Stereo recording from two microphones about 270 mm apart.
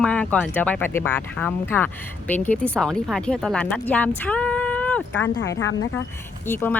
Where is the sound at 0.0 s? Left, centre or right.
Centre.